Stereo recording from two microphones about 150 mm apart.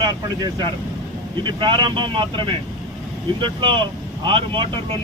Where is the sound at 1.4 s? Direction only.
30° right (ahead or behind).